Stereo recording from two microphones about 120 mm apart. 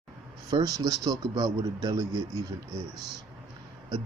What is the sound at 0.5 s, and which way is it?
Speech, 30° right (ahead or behind).